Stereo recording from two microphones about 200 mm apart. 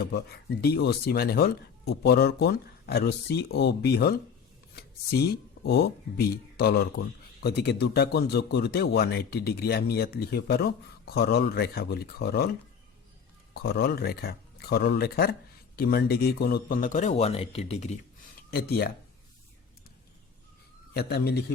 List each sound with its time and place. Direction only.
0.6 s speech: 50° left (ahead or behind)
13.5 s speech: 50° left (ahead or behind); by 18.0 s 35° left (ahead or behind)
18.5 s speech: 50° left (ahead or behind)
20.9 s speech: 55° left (ahead or behind)